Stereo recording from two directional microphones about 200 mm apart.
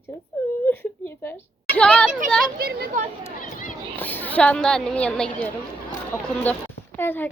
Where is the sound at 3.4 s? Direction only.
40° left (ahead or behind).